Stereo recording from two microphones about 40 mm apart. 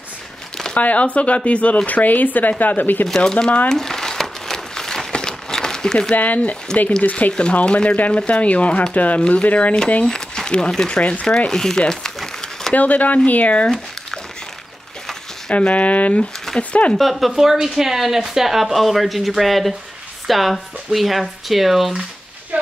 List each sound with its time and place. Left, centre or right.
0.7 s speech: left
1.9 s speech: left
3.6 s crumpling: centre
6.1 s speech: left
7.3 s speech: left
10.0 s a sound: centre
10.9 s speech: left
11.2 s speech: centre
12.7 s speech: left
15.7 s speech: left
16.9 s speech: centre
22.5 s a sound: right